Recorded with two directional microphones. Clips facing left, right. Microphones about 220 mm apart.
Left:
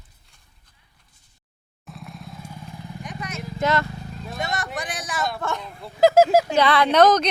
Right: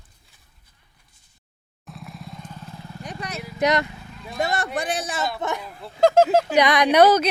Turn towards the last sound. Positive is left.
turn(degrees=-10)  # may be behind; listen again after turning